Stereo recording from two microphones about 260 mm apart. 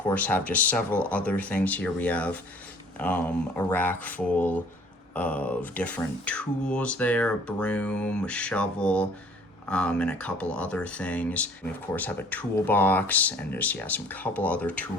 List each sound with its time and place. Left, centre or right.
0.0 s speech: centre